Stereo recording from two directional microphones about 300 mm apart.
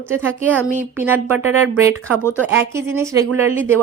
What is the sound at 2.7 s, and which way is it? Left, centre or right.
Speech, centre.